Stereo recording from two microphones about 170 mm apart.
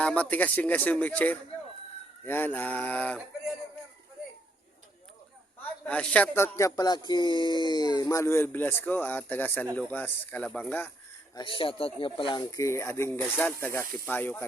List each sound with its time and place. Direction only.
0.0 s speech: 5° left (ahead or behind)
5.8 s speech: 5° left (ahead or behind)
11.3 s speech: 30° left (ahead or behind); by 14.4 s 10° left (ahead or behind)